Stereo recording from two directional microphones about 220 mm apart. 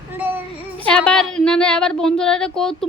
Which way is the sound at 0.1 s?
10° right (ahead or behind).